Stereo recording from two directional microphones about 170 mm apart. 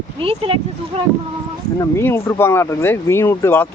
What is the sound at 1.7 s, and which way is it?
Speech, 15° left (ahead or behind).